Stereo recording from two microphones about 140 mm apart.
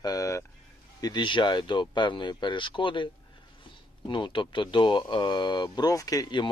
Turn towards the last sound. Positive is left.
turn(degrees=35)  # may be behind; listen again after turning